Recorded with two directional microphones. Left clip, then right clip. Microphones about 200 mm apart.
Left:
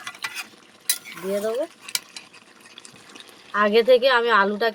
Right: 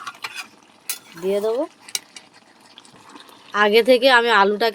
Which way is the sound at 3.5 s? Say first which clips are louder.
Right 2 dB; 35° right (ahead or behind).